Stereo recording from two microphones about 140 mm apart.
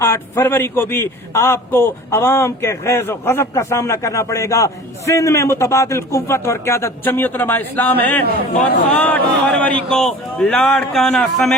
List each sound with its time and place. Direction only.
0.0 s a man's voice: 20° left (ahead or behind)